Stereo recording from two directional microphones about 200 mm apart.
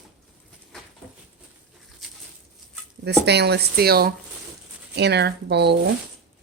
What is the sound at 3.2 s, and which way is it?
Speech, 55° right (ahead or behind).